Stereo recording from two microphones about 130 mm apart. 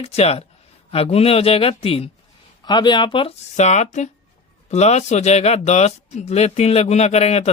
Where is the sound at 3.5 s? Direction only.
60° left (ahead or behind).